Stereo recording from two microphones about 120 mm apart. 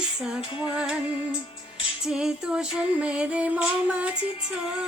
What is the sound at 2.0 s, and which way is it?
Music, 5° right (ahead or behind).